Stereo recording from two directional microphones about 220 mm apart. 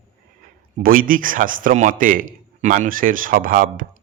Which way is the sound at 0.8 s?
40° right (ahead or behind).